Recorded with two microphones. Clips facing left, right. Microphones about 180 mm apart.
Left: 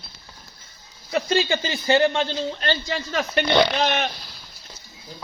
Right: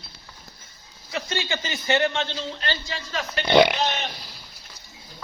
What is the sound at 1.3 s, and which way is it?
A man's voice, 30° left (ahead or behind).